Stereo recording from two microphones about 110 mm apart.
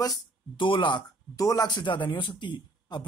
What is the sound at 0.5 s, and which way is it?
Speech, 50° left (ahead or behind).